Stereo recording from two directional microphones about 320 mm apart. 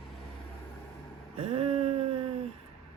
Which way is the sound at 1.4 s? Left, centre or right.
Centre.